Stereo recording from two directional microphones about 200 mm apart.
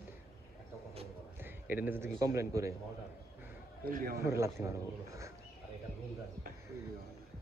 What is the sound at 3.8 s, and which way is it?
Speech, 45° right (ahead or behind).